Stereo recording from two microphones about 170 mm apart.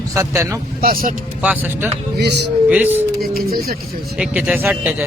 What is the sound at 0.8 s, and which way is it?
Speech, 55° right (ahead or behind).